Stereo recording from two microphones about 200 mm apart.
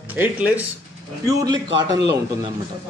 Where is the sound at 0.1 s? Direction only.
10° right (ahead or behind).